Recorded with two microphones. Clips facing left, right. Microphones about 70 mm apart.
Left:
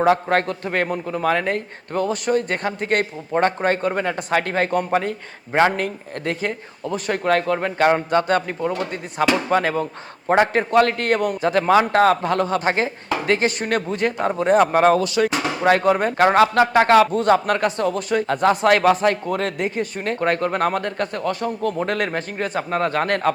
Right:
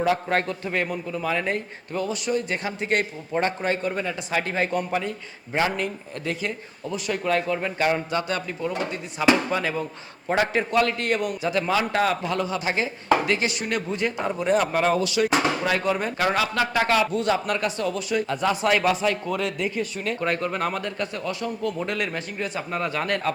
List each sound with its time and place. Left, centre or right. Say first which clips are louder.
0.0 s a man's voice: left 5 dB; left